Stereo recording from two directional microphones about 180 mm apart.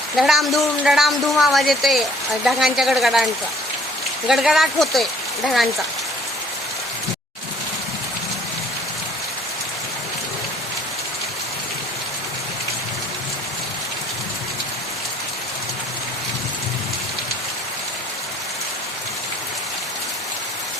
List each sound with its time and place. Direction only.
0.2 s a woman's voice: centre (ahead or behind)
4.3 s a woman's voice: centre (ahead or behind)